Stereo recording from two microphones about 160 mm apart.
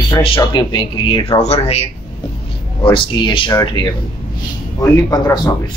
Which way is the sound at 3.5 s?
20° left (ahead or behind).